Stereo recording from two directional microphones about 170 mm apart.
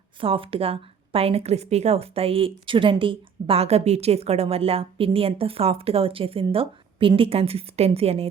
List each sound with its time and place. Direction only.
0.2 s a woman's voice: 30° right (ahead or behind)